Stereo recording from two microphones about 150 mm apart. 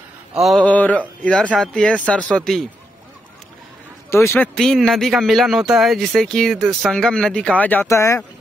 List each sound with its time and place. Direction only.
0.3 s speech: centre (ahead or behind)
4.1 s speech: 15° left (ahead or behind)
4.6 s speech: 5° left (ahead or behind); by 8.3 s 20° left (ahead or behind)